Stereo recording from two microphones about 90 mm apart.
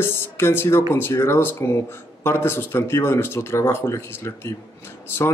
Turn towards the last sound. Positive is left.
turn(degrees=25)  # may be behind; listen again after turning